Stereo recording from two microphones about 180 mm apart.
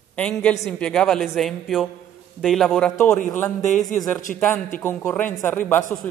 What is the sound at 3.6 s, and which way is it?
Speech, 45° left (ahead or behind).